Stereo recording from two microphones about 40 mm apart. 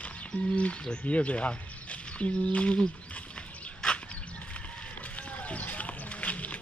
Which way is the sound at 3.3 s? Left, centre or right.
Left.